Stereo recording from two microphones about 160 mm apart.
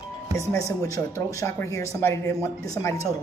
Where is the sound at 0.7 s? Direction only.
20° left (ahead or behind).